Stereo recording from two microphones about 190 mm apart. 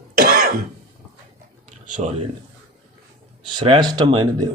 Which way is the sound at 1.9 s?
40° right (ahead or behind).